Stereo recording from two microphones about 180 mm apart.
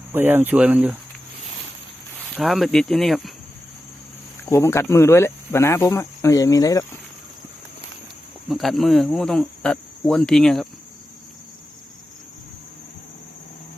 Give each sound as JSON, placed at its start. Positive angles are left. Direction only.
{"t": 0.1, "sound": "speech", "side_deg": -10}
{"t": 2.3, "sound": "speech", "side_deg": 0}
{"t": 4.4, "sound": "speech", "side_deg": 15}
{"t": 8.4, "sound": "speech", "side_deg": 0}